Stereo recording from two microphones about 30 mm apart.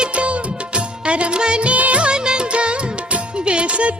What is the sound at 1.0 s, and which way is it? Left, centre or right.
Music, right.